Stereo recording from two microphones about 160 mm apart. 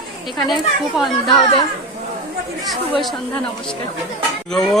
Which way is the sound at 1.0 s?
Centre (ahead or behind).